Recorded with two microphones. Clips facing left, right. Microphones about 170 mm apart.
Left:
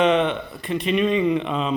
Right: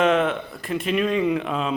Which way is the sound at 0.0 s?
Centre (ahead or behind).